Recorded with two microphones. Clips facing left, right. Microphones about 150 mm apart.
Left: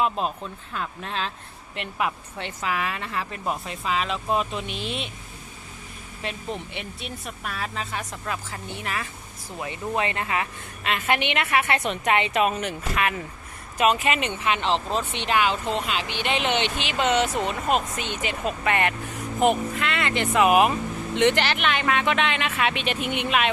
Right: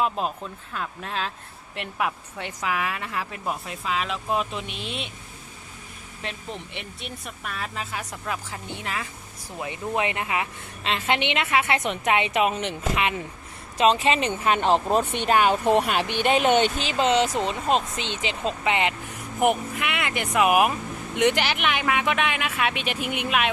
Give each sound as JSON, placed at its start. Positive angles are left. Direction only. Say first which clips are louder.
{"t": 0.0, "sound": "a woman's voice", "louder": "left 1 dB", "side_deg": 0}
{"t": 6.2, "sound": "a woman's voice", "louder": "left 3 dB", "side_deg": 0}
{"t": 8.3, "sound": "a woman's voice", "louder": "right 1 dB", "side_deg": -15}